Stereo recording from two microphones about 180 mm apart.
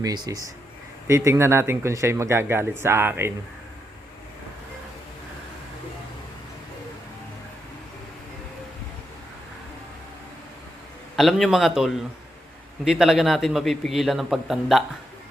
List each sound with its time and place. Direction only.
0.0 s a man's voice: 20° right (ahead or behind)
11.2 s a man's voice: centre (ahead or behind)